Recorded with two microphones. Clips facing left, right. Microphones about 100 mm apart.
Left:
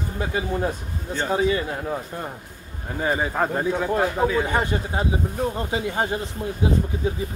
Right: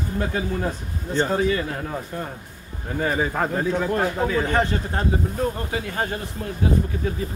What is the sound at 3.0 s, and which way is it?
Speech, 15° left (ahead or behind).